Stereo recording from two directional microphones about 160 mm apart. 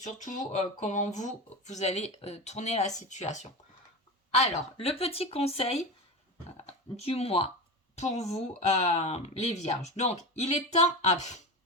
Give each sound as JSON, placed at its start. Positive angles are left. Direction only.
{"t": 0.0, "sound": "a woman's voice", "side_deg": 50}